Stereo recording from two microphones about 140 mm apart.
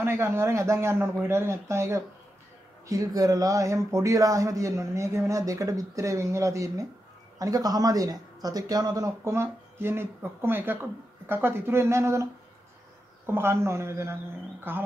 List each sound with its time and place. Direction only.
0.0 s speech: 15° right (ahead or behind)
13.3 s speech: 15° right (ahead or behind)